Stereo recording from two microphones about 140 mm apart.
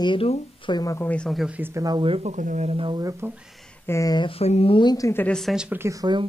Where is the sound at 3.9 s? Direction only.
25° left (ahead or behind).